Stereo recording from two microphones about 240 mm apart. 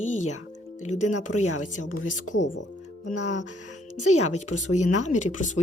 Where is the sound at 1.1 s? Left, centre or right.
Left.